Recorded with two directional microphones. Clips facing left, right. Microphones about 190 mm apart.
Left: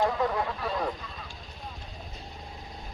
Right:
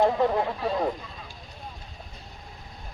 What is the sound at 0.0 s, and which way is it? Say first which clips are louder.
Speech: right 5 dB; 25° right (ahead or behind).